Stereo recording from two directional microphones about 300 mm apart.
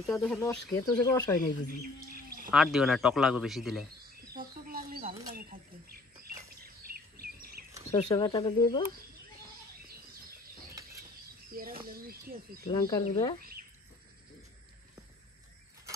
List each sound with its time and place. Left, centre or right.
0.0 s speech: centre
2.0 s bird: right
2.5 s a man's voice: centre
4.3 s bird: right
6.6 s bird vocalization: right
7.9 s speech: centre
11.5 s a sound: right
12.6 s speech: centre